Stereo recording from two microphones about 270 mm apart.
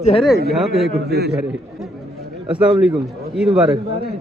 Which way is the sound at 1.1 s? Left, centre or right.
Right.